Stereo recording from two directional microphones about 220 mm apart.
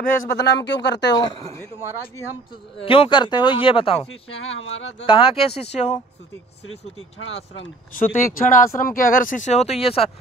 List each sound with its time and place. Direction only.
0.3 s speech: 50° left (ahead or behind)
2.8 s speech: 25° left (ahead or behind)
4.1 s speech: 60° left (ahead or behind)
5.0 s speech: 25° left (ahead or behind)
7.0 s speech: 60° left (ahead or behind)
7.9 s speech: 40° left (ahead or behind)